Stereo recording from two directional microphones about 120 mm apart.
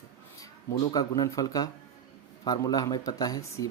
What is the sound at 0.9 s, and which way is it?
Speech, 35° left (ahead or behind).